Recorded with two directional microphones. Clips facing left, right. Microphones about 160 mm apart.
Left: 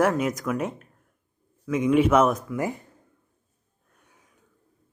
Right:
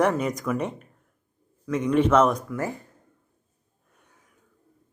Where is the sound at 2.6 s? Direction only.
15° left (ahead or behind).